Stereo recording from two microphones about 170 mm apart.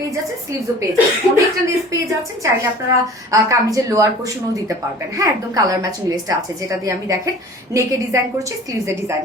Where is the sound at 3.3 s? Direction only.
20° right (ahead or behind).